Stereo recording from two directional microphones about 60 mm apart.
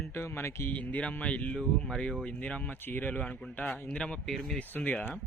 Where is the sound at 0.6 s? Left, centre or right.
Left.